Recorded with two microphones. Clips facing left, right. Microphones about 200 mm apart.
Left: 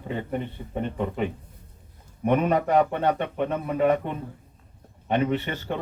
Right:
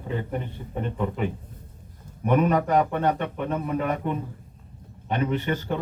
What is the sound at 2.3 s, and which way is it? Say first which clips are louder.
Speech: even; 40° right (ahead or behind).